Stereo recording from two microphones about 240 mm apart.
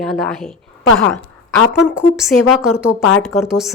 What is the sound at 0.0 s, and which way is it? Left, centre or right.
Speech, centre.